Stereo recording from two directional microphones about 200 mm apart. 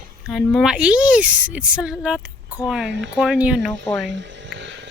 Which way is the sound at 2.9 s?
65° right (ahead or behind).